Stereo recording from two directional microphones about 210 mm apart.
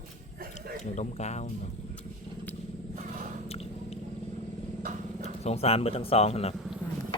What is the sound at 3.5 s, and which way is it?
Squish, 30° left (ahead or behind).